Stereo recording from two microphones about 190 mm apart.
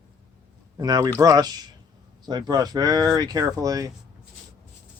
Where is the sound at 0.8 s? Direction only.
20° right (ahead or behind).